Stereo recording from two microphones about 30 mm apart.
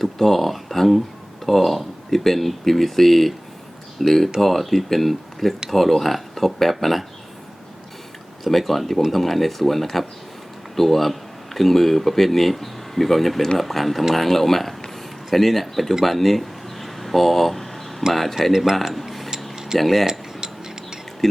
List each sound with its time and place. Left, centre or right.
0.0 s speech: centre
8.4 s speech: centre
16.0 s a sound: centre
18.1 s speech: centre
18.5 s speech: centre
19.5 s tick-tock: right
19.8 s speech: centre
20.1 s cutlery: right